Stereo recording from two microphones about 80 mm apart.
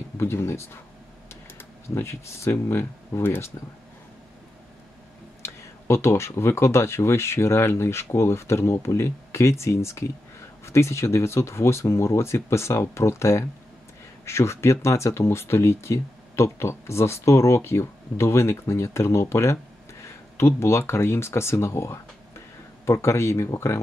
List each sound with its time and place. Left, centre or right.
0.2 s speech: left
5.4 s speech: left